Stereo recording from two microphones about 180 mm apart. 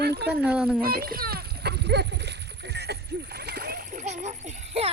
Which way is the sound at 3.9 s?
40° right (ahead or behind).